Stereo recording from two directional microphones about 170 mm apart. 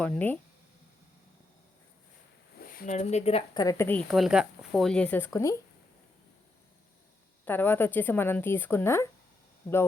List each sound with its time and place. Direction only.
0.0 s speech: 10° left (ahead or behind)
2.7 s speech: 45° left (ahead or behind)
3.6 s speech: 20° left (ahead or behind)
4.1 s speech: centre (ahead or behind); by 5.5 s 15° left (ahead or behind)
7.4 s speech: 10° left (ahead or behind)